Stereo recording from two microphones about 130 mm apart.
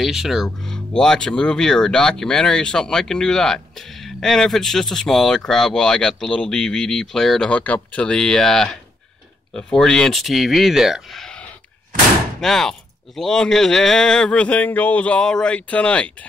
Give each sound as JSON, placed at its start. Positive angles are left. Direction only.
{"t": 0.0, "sound": "speech", "side_deg": -5}